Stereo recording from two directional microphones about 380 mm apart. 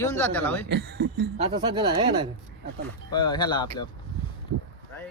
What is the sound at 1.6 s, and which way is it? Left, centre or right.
Speech, centre.